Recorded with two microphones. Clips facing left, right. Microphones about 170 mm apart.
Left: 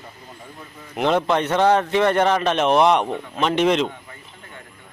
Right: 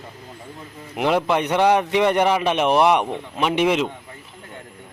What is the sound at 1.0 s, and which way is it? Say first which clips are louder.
A man's voice: even; 10° right (ahead or behind).